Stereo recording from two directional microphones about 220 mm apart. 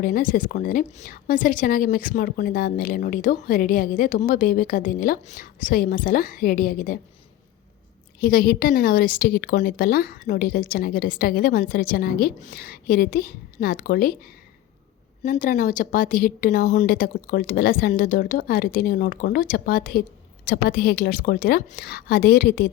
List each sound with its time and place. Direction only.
0.0 s a woman's voice: 40° left (ahead or behind)
8.2 s a woman's voice: 45° left (ahead or behind)